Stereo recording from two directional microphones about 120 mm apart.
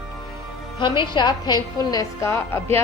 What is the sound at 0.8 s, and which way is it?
A woman's voice, 40° left (ahead or behind).